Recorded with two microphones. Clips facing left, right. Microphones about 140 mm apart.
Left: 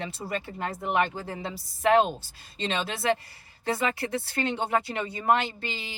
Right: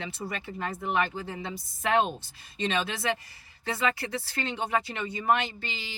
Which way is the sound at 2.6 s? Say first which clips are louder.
Left 1 dB; 25° left (ahead or behind).